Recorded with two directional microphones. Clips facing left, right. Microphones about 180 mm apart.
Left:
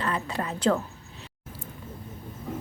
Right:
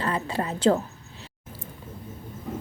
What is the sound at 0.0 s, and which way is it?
Speech, 30° right (ahead or behind).